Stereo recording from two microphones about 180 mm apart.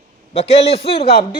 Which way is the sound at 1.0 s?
60° left (ahead or behind).